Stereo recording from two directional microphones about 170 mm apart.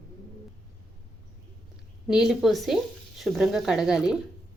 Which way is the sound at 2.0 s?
Centre (ahead or behind).